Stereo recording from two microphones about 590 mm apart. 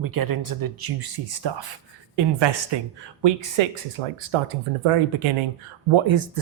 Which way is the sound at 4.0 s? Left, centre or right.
Right.